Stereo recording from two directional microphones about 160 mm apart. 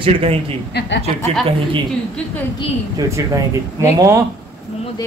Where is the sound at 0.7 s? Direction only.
90° left.